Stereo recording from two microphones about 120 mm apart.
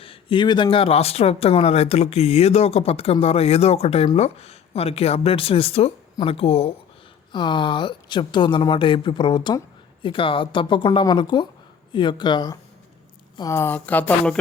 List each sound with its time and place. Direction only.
0.0 s speech: 50° left (ahead or behind)
7.3 s a woman's voice: 40° left (ahead or behind)
13.5 s speech: 20° left (ahead or behind)